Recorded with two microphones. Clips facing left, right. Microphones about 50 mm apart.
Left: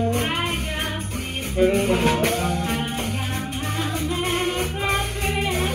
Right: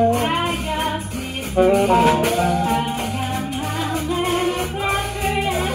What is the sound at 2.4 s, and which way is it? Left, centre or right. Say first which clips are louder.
Music: right 6 dB; right.